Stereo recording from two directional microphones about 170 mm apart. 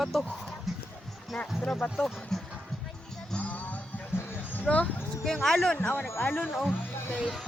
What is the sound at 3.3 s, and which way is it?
Music, 10° left (ahead or behind).